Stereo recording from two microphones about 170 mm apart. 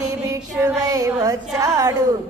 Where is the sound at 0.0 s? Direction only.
20° right (ahead or behind).